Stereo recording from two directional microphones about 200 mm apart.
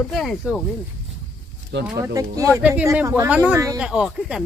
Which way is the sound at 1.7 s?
60° right (ahead or behind).